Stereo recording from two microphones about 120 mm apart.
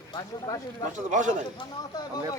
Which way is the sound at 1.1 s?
90° right.